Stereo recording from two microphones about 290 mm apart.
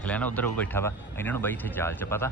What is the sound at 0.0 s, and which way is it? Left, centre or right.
Speech, centre.